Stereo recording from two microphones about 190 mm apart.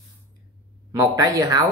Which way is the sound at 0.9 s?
20° right (ahead or behind).